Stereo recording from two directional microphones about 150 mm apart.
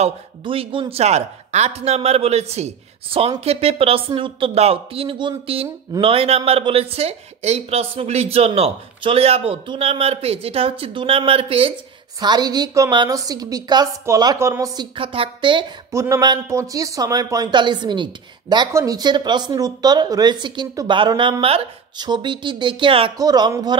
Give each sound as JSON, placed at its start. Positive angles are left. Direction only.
{"t": 0.4, "sound": "speech", "side_deg": -35}
{"t": 12.2, "sound": "speech", "side_deg": -30}
{"t": 14.8, "sound": "speech", "side_deg": -35}
{"t": 15.9, "sound": "speech", "side_deg": -20}
{"t": 23.1, "sound": "speech", "side_deg": -25}